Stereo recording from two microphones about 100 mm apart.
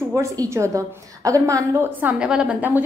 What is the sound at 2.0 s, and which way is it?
Speech, 15° right (ahead or behind).